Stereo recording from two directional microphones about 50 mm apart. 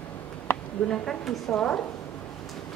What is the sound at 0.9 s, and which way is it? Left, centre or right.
Speech, centre.